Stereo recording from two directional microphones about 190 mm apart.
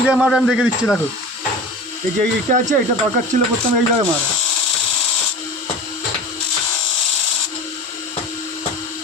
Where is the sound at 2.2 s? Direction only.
40° right (ahead or behind).